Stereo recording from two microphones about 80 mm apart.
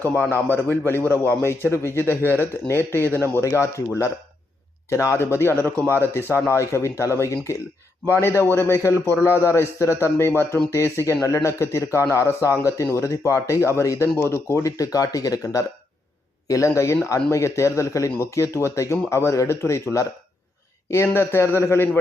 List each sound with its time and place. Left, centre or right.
0.3 s speech: left